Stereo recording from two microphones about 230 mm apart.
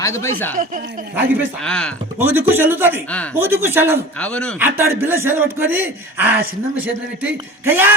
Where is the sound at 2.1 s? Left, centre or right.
Centre.